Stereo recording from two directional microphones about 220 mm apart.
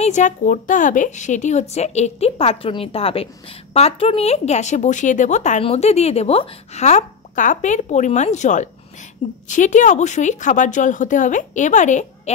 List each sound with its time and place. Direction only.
0.0 s a woman's voice: 35° left (ahead or behind)